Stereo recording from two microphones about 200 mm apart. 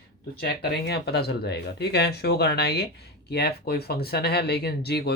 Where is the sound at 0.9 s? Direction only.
55° left (ahead or behind).